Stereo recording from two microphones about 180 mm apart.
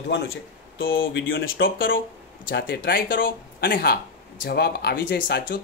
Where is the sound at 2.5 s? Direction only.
65° left (ahead or behind).